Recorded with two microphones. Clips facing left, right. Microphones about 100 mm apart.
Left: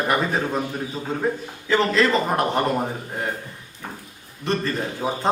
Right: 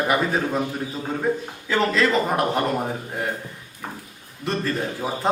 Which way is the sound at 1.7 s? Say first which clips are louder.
Left 1 dB; centre (ahead or behind).